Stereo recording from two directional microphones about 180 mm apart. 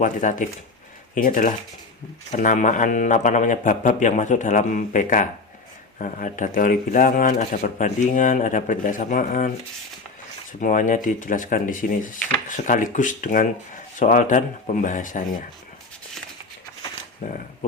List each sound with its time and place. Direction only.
0.0 s speech: 45° left (ahead or behind)
10.6 s speech: 45° left (ahead or behind)